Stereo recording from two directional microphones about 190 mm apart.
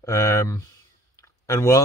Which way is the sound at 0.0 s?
15° left (ahead or behind).